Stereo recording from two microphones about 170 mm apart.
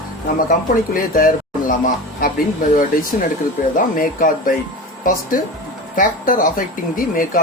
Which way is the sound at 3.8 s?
55° left (ahead or behind).